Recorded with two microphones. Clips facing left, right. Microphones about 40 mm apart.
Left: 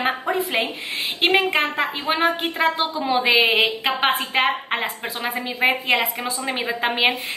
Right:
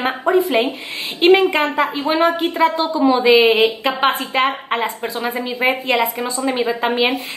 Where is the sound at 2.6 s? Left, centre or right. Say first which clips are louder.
Right 7 dB; left.